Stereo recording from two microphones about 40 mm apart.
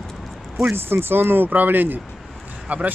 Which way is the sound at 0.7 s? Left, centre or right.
Right.